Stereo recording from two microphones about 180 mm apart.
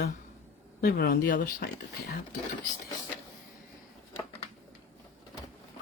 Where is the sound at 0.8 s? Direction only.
55° left (ahead or behind).